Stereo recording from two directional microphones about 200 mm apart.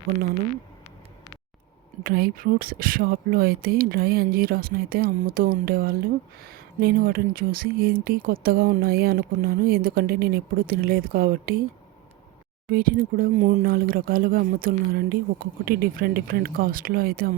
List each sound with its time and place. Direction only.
2.0 s speech: 50° right (ahead or behind)
12.7 s speech: 45° right (ahead or behind)